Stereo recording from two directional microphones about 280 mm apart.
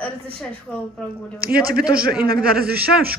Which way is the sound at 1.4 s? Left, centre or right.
Right.